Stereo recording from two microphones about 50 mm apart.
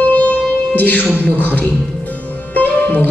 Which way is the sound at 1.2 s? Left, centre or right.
Left.